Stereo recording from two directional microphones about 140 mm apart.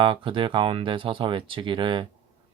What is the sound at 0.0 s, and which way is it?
Speech, 35° right (ahead or behind).